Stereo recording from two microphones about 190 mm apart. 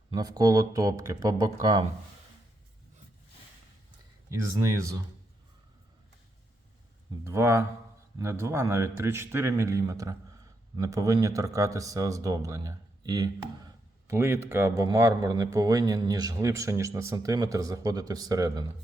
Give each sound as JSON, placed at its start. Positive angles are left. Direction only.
{"t": 0.1, "sound": "speech", "side_deg": -20}
{"t": 4.3, "sound": "speech", "side_deg": -15}
{"t": 7.3, "sound": "speech", "side_deg": -15}